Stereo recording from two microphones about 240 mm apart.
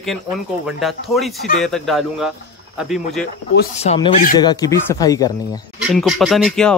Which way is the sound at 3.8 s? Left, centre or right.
Left.